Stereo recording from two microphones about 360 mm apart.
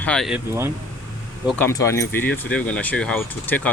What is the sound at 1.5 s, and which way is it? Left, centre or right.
Speech, centre.